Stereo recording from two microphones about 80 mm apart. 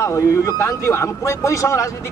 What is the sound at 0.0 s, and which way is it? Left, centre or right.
Speech, left.